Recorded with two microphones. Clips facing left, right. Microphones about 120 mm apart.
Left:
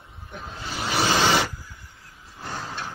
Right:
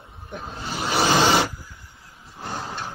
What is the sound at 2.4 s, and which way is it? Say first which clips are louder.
Vehicle: right 2 dB; 20° right (ahead or behind).